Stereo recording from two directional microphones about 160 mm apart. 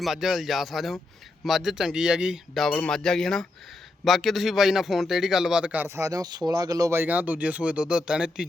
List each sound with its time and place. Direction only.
0.0 s a man's voice: centre (ahead or behind)